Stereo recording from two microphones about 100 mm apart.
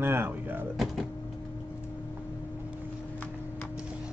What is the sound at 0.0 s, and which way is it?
Speech, 20° right (ahead or behind).